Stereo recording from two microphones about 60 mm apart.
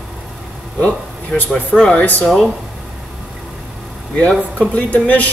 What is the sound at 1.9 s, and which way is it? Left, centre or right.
Speech, left.